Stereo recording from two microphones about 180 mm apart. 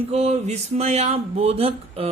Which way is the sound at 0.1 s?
35° right (ahead or behind).